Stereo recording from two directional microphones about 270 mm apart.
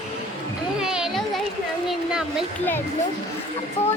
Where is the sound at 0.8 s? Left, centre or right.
Centre.